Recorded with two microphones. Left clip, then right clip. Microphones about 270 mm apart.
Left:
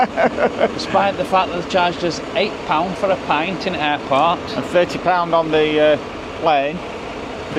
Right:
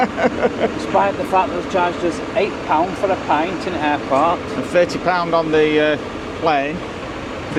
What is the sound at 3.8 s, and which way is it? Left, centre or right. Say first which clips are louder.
Speech: even; left.